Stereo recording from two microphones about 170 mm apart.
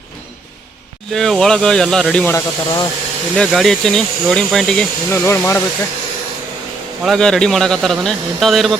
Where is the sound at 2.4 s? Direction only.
25° left (ahead or behind).